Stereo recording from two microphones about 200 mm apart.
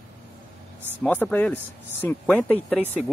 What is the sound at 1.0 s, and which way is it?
Speech, 5° left (ahead or behind).